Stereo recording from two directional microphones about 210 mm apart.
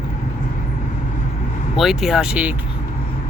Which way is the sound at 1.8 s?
Centre (ahead or behind).